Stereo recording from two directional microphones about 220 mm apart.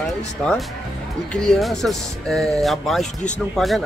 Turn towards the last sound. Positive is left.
turn(degrees=0)  # may be behind; listen again after turning